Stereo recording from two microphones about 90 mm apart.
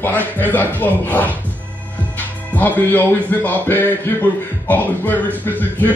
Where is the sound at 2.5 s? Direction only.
20° left (ahead or behind).